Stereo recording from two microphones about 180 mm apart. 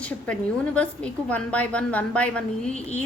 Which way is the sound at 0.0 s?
5° left (ahead or behind).